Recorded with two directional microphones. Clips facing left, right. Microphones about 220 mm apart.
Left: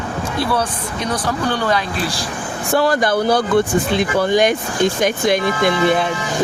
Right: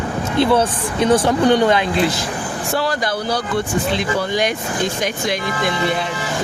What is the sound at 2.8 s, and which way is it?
Speech, 55° left (ahead or behind).